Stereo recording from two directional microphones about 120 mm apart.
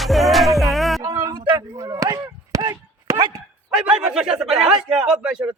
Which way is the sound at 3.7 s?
10° right (ahead or behind).